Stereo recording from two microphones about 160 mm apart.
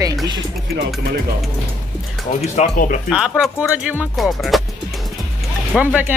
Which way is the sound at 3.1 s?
5° right (ahead or behind).